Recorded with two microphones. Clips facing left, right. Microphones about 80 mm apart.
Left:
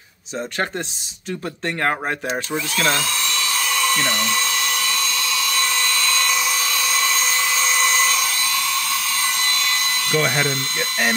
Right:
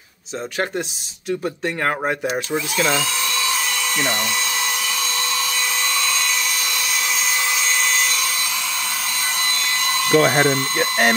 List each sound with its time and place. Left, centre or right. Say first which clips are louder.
1.8 s speech: even; centre
2.5 s speech: even; centre
3.6 s dental drill: left 2 dB; centre
4.1 s hair dryer: left 1 dB; centre
5.5 s dental drill: left 1 dB; centre
6.2 s hair dryer: left 2 dB; centre
10.1 s speech: right 6 dB; right